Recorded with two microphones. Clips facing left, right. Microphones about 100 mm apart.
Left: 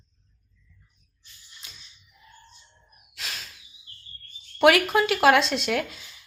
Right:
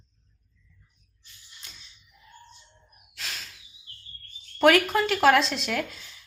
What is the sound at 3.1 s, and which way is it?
Gasp, 5° left (ahead or behind).